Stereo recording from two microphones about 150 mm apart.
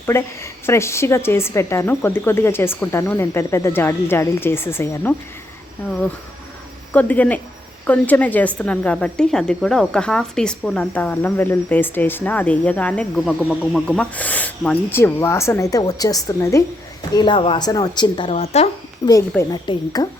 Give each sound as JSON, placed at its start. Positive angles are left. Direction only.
{"t": 0.0, "sound": "a woman's voice", "side_deg": 15}
{"t": 6.9, "sound": "a woman's voice", "side_deg": 10}
{"t": 18.3, "sound": "speech", "side_deg": 45}
{"t": 19.0, "sound": "speech", "side_deg": 20}